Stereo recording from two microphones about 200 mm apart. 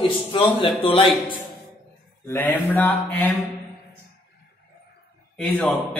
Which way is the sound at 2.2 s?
10° left (ahead or behind).